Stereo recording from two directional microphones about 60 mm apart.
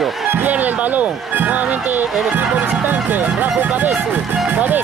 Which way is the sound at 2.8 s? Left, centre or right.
Right.